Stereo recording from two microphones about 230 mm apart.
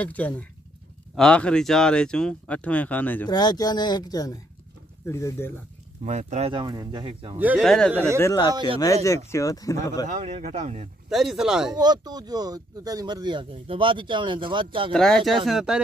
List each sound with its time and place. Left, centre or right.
0.0 s speech: centre
6.0 s speech: right
7.3 s speech: centre
8.2 s speech: centre
10.0 s speech: right
11.1 s speech: centre
11.7 s speech: centre
14.9 s speech: centre